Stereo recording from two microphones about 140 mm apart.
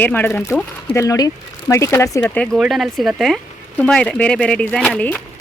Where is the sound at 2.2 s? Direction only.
5° left (ahead or behind).